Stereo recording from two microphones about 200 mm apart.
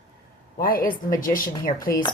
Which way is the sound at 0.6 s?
45° left (ahead or behind).